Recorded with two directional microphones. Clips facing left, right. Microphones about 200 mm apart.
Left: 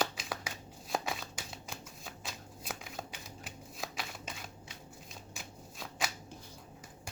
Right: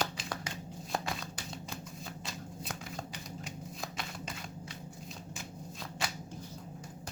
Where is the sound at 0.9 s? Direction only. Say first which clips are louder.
Left 1 dB; 5° left (ahead or behind).